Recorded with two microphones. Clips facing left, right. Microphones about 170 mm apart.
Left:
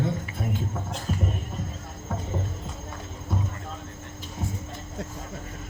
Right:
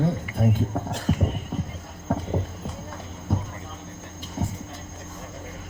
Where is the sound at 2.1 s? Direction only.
55° right (ahead or behind).